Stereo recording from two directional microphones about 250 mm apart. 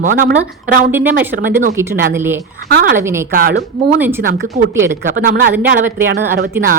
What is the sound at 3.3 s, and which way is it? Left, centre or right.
Speech, right.